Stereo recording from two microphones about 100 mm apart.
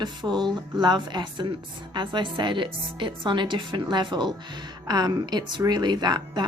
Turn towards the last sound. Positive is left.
turn(degrees=-45)  # may be behind; listen again after turning